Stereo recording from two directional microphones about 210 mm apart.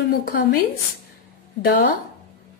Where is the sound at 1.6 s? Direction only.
45° left (ahead or behind).